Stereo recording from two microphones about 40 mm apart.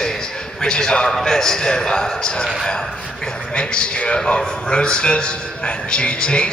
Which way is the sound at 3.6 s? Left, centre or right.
Left.